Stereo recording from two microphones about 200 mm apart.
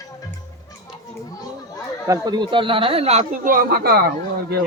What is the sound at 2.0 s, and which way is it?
Speech, 20° right (ahead or behind).